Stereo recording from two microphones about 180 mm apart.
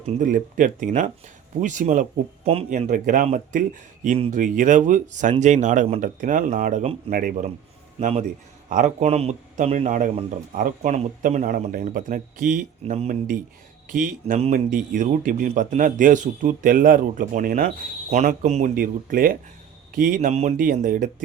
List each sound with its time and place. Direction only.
0.0 s a man's voice: 45° right (ahead or behind)
2.6 s a man's voice: 45° right (ahead or behind)
18.7 s a man's voice: 50° right (ahead or behind)